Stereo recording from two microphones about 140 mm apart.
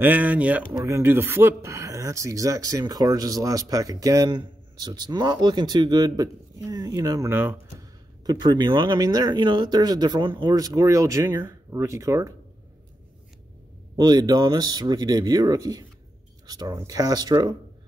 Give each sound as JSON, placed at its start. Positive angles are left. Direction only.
{"t": 0.0, "sound": "speech", "side_deg": -10}
{"t": 0.7, "sound": "speech", "side_deg": -20}
{"t": 7.2, "sound": "speech", "side_deg": -15}
{"t": 8.3, "sound": "speech", "side_deg": -30}
{"t": 13.9, "sound": "speech", "side_deg": -30}